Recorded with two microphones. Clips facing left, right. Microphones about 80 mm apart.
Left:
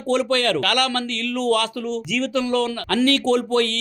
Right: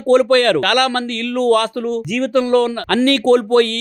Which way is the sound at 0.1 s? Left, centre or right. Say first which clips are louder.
Right 8 dB; right.